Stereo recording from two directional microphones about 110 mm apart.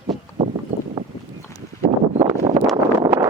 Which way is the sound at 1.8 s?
65° right (ahead or behind).